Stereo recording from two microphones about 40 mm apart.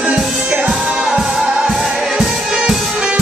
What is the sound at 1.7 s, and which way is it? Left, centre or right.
Music, centre.